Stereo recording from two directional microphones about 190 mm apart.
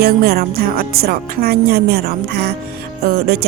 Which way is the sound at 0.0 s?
55° right (ahead or behind).